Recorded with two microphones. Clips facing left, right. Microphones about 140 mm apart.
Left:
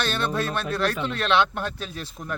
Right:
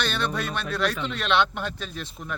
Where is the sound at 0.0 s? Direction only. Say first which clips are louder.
Left 2 dB; centre (ahead or behind).